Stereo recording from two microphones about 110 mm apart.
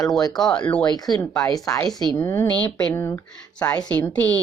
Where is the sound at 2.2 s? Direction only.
20° left (ahead or behind).